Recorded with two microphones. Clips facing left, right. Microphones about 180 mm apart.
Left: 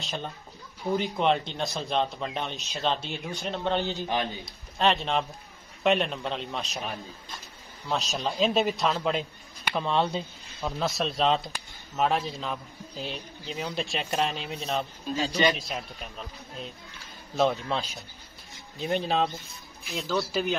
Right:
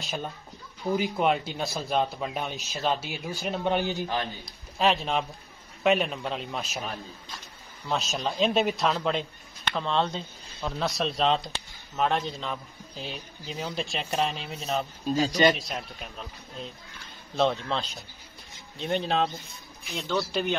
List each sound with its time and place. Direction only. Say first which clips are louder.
0.9 s a man's voice: even; centre (ahead or behind)
4.0 s speech: left 1 dB; 15° left (ahead or behind)
4.5 s a man's voice: right 1 dB; centre (ahead or behind)
9.7 s speech: left 1 dB; 15° left (ahead or behind)
10.6 s a man's voice: even; centre (ahead or behind)
18.8 s a man's voice: even; centre (ahead or behind)